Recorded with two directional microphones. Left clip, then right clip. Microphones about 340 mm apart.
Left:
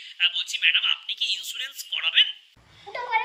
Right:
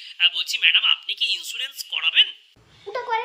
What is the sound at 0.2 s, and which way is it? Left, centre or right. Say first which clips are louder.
A man's voice: right 4 dB; centre.